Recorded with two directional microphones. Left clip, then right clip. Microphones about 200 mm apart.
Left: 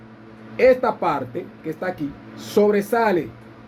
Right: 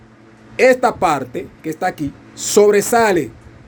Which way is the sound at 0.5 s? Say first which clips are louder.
Right 4 dB; 60° right (ahead or behind).